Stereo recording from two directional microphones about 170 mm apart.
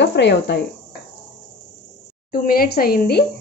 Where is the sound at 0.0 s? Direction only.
90° left.